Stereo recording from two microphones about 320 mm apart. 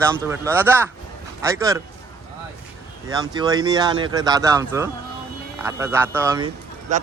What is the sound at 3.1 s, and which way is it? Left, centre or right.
Speech, centre.